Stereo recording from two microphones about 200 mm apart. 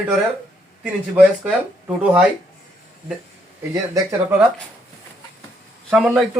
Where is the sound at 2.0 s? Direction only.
5° right (ahead or behind).